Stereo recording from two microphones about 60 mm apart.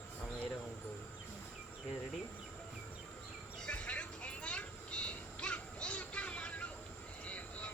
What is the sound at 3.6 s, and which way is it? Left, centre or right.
Vehicle, left.